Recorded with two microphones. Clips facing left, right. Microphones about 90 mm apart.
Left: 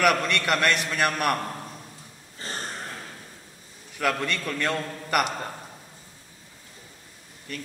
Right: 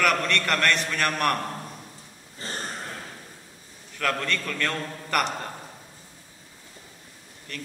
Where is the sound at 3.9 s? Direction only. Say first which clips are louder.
Left 1 dB; 15° left (ahead or behind).